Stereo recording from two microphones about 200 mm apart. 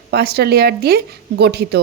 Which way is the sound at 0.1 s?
50° right (ahead or behind).